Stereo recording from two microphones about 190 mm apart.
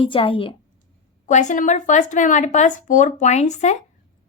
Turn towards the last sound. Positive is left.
turn(degrees=35)  # may be behind; listen again after turning